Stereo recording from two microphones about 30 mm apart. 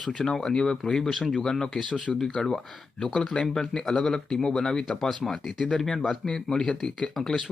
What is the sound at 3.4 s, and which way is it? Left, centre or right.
Speech, centre.